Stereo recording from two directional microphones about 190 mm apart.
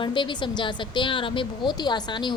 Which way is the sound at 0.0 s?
25° left (ahead or behind).